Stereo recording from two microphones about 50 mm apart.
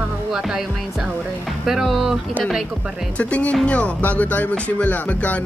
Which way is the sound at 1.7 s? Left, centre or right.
Centre.